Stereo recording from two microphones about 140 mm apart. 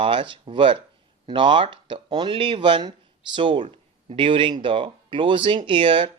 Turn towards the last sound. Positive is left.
turn(degrees=-35)  # may be behind; listen again after turning